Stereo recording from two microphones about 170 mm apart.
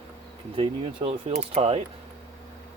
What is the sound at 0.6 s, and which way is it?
Speech, 35° right (ahead or behind).